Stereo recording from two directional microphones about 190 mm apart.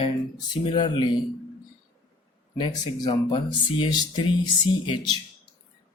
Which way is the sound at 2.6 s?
25° left (ahead or behind).